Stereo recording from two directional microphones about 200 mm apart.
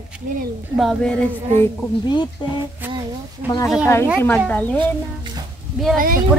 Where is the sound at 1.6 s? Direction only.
20° left (ahead or behind).